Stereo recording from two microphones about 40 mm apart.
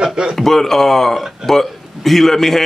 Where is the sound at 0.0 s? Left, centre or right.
Centre.